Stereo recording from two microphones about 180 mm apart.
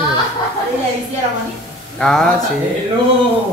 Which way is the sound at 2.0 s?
5° left (ahead or behind).